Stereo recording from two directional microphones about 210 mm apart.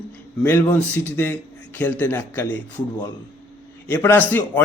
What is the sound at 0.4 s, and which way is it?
A man's voice, 10° left (ahead or behind).